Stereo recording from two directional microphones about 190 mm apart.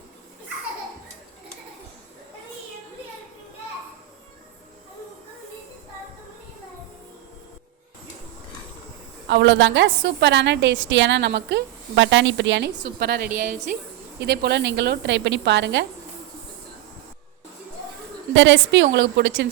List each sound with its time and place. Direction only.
9.2 s a woman's voice: 70° right (ahead or behind)
18.3 s a woman's voice: 75° right (ahead or behind)